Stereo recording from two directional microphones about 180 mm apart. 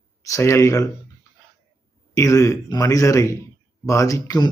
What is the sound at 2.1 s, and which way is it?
A man's voice, 20° left (ahead or behind).